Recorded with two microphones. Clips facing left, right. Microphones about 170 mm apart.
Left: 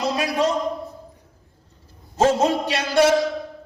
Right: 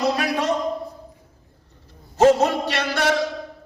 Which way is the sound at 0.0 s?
65° right (ahead or behind).